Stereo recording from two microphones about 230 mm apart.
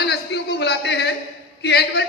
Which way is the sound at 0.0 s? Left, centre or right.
Left.